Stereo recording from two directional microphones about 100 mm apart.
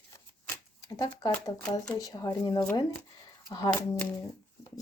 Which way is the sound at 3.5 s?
45° left (ahead or behind).